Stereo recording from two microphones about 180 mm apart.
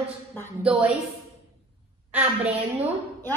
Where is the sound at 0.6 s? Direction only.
5° right (ahead or behind).